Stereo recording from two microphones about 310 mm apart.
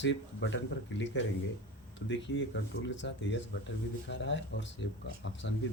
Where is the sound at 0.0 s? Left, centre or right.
Left.